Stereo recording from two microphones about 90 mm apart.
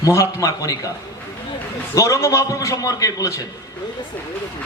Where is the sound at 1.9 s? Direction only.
35° left (ahead or behind).